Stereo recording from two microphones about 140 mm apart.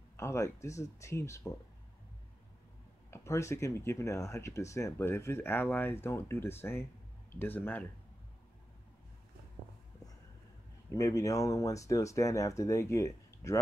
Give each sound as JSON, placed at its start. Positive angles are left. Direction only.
{"t": 0.2, "sound": "speech", "side_deg": 20}
{"t": 3.1, "sound": "speech", "side_deg": 20}
{"t": 10.9, "sound": "speech", "side_deg": 20}